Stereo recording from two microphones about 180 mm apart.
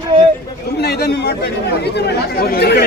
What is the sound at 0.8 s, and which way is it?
Speech, 65° left (ahead or behind).